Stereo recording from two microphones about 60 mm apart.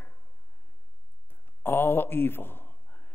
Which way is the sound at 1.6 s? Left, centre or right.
Left.